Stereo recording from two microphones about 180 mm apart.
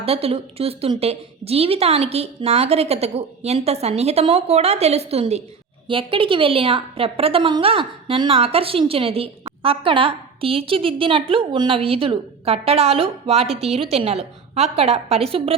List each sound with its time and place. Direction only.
0.0 s a woman's voice: 35° right (ahead or behind)